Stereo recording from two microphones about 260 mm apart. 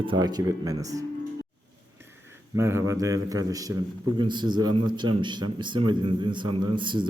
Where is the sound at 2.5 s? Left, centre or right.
Centre.